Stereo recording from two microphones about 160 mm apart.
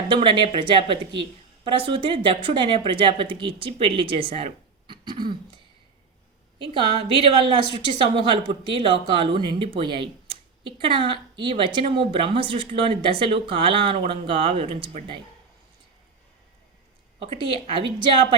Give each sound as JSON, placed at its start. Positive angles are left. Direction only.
{"t": 0.1, "sound": "speech", "side_deg": -30}
{"t": 6.6, "sound": "speech", "side_deg": -30}
{"t": 17.2, "sound": "speech", "side_deg": -35}